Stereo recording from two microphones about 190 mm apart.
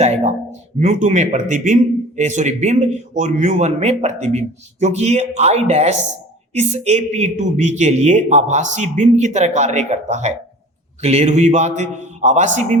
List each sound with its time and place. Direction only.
0.0 s a man's voice: 35° right (ahead or behind)